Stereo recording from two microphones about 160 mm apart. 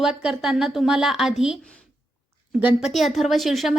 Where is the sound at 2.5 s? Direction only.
5° right (ahead or behind).